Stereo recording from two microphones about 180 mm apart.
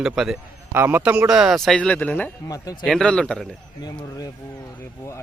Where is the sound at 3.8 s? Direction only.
20° left (ahead or behind).